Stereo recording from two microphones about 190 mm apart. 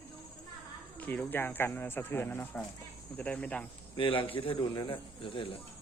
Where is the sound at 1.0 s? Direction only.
10° left (ahead or behind).